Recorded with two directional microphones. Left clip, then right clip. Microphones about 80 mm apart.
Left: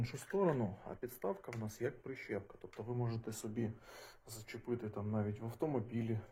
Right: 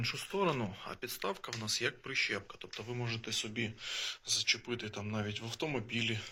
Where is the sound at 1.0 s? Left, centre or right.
Left.